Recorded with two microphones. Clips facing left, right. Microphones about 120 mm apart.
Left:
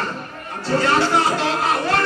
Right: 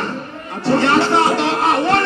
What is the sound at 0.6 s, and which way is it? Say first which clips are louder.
Speech: right 4 dB; 25° right (ahead or behind).